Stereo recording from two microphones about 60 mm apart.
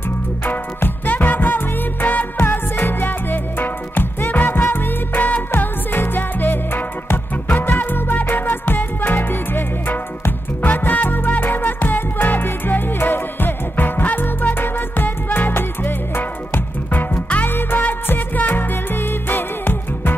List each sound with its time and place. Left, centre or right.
0.5 s music: left